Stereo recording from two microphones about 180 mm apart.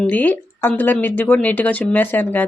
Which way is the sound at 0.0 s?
10° left (ahead or behind).